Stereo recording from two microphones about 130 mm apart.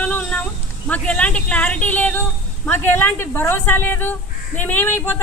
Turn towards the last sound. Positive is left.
turn(degrees=15)  # may be behind; listen again after turning